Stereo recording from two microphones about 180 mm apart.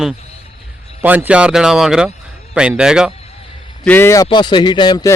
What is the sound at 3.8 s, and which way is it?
Speech, 10° left (ahead or behind).